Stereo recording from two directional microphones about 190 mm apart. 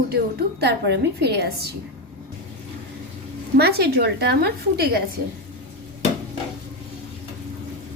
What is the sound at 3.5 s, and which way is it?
A woman's voice, 55° right (ahead or behind).